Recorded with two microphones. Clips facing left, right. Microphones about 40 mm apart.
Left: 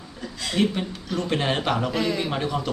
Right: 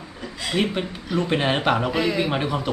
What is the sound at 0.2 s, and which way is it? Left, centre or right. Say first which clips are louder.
A woman's voice: even; centre.